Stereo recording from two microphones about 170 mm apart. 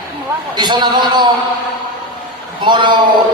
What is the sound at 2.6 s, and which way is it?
Speech, 25° right (ahead or behind).